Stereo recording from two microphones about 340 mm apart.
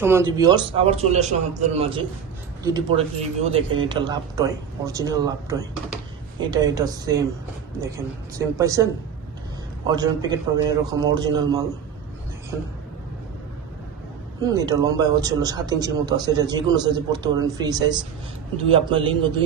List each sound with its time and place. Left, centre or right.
0.0 s speech: centre
14.4 s speech: centre